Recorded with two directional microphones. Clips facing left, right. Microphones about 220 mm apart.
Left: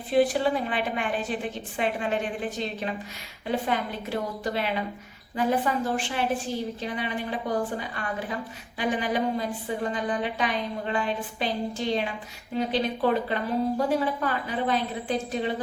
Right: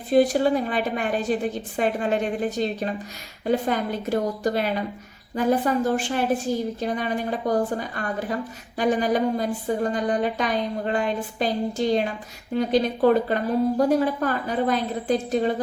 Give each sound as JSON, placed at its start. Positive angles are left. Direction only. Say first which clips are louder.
{"t": 0.1, "sound": "a woman's voice", "louder": "right 4 dB", "side_deg": -40}